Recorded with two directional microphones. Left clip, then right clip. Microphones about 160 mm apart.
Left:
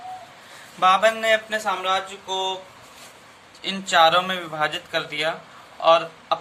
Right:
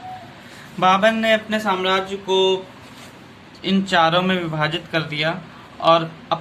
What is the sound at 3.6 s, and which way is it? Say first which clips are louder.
Speech: even; 25° left (ahead or behind).